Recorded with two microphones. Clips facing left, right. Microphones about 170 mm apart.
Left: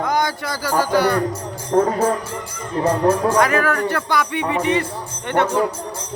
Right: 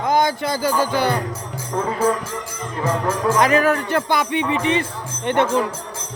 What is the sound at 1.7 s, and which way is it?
Music, 45° left (ahead or behind).